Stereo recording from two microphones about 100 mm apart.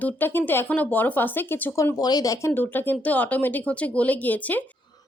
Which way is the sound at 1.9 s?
40° left (ahead or behind).